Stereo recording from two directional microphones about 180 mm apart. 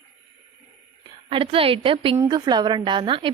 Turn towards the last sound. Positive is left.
turn(degrees=-30)  # may be behind; listen again after turning